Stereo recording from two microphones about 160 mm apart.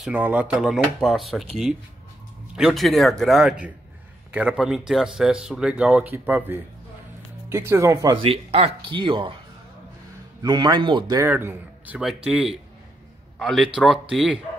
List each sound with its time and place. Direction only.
0.0 s speech: 10° right (ahead or behind)
2.5 s speech: centre (ahead or behind); by 8.2 s 20° right (ahead or behind)
8.2 s speech: 40° right (ahead or behind)
10.4 s speech: 25° right (ahead or behind)
11.2 s a man's voice: 15° right (ahead or behind)